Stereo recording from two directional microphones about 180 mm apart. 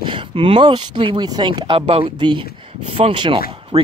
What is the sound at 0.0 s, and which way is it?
Speech, 30° right (ahead or behind).